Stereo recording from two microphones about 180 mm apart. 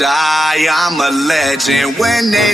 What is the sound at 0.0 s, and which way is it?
Music, centre (ahead or behind).